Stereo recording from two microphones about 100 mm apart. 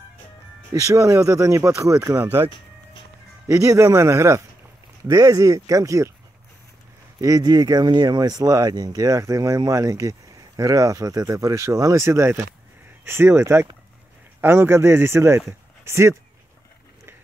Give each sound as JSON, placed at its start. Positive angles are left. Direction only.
{"t": 0.7, "sound": "speech", "side_deg": -30}
{"t": 3.4, "sound": "speech", "side_deg": -30}
{"t": 7.2, "sound": "speech", "side_deg": -35}